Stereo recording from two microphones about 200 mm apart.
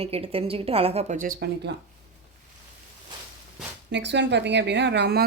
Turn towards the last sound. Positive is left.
turn(degrees=-55)  # may be behind; listen again after turning